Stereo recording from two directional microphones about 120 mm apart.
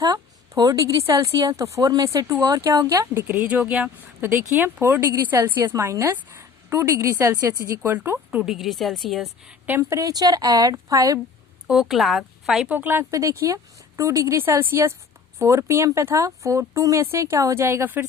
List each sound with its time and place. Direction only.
0.0 s a woman's voice: 30° right (ahead or behind)
5.8 s a woman's voice: 25° right (ahead or behind)
8.4 s a woman's voice: centre (ahead or behind)
9.5 s speech: 15° right (ahead or behind)
10.0 s speech: 30° right (ahead or behind)
11.7 s a woman's voice: 5° right (ahead or behind)
12.6 s speech: 15° right (ahead or behind)